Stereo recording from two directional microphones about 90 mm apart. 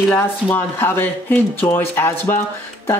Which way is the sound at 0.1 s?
30° left (ahead or behind).